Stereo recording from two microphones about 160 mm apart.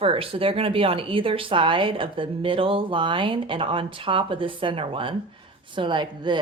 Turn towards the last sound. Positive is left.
turn(degrees=-30)  # may be behind; listen again after turning